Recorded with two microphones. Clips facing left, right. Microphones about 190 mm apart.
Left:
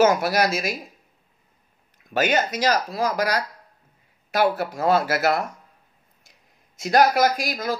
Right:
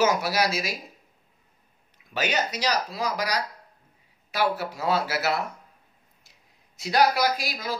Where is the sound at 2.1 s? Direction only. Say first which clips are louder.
Left 6 dB; 50° left (ahead or behind).